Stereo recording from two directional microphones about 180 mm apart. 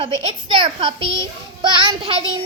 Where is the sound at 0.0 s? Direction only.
25° right (ahead or behind).